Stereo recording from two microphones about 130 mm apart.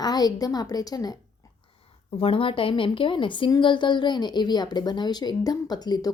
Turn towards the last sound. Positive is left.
turn(degrees=30)  # may be behind; listen again after turning